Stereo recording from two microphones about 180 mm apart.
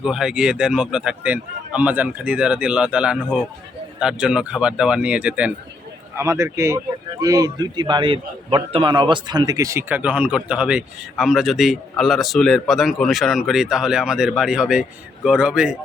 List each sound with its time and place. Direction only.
0.0 s a man's voice: 5° right (ahead or behind)